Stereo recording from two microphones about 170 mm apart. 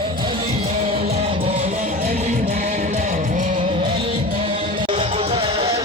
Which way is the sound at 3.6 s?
30° right (ahead or behind).